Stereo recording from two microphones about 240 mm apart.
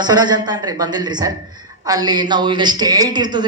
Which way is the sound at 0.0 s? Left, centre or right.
Centre.